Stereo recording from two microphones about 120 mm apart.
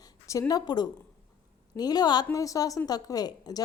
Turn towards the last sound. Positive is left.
turn(degrees=35)  # may be behind; listen again after turning